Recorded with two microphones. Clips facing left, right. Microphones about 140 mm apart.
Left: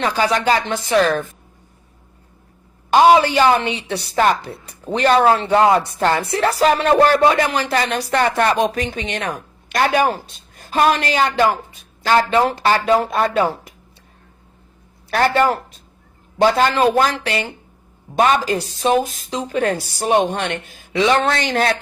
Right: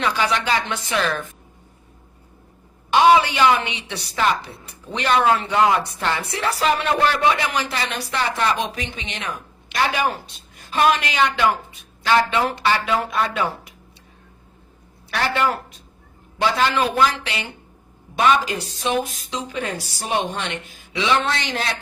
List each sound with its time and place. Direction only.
0.0 s a woman's voice: 40° left (ahead or behind)
2.9 s a woman's voice: 40° left (ahead or behind)
15.1 s a woman's voice: 40° left (ahead or behind)